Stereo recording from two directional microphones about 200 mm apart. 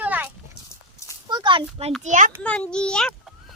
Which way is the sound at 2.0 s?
40° right (ahead or behind).